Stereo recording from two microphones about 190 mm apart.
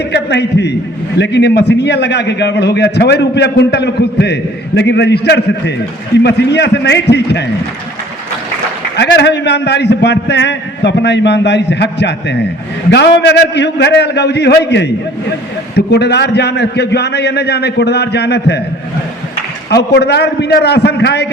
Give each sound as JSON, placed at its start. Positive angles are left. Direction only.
{"t": 0.1, "sound": "a man's voice", "side_deg": 65}
{"t": 9.0, "sound": "a man's voice", "side_deg": 65}
{"t": 19.7, "sound": "a man's voice", "side_deg": 60}